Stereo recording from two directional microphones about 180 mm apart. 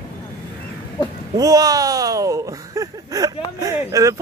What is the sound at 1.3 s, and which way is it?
Speech, 20° right (ahead or behind).